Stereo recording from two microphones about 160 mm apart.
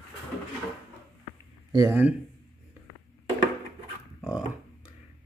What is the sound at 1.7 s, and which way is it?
Speech, 20° right (ahead or behind).